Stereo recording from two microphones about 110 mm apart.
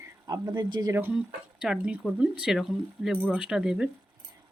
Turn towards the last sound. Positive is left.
turn(degrees=-5)  # may be behind; listen again after turning